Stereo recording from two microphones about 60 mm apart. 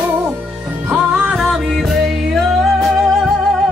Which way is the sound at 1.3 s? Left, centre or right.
Centre.